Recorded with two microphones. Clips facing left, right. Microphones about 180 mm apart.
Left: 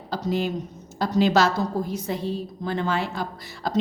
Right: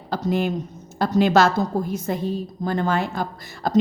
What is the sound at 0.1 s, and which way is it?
A woman's voice, 55° right (ahead or behind).